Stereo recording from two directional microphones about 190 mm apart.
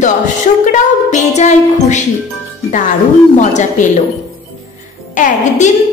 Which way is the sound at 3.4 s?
40° left (ahead or behind).